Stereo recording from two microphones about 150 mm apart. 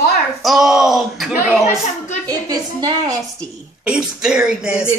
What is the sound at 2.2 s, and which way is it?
Speech, 25° right (ahead or behind).